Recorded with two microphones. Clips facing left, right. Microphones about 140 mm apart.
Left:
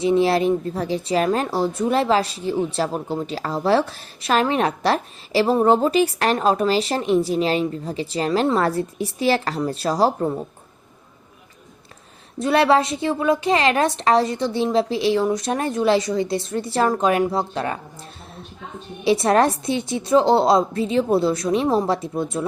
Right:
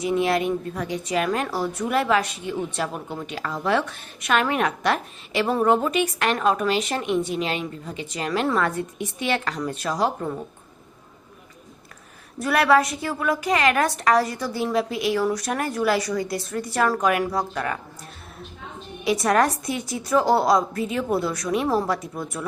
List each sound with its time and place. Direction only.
0.0 s a woman's voice: 30° left (ahead or behind)
12.4 s a woman's voice: 25° left (ahead or behind)
19.0 s a woman's voice: 30° left (ahead or behind)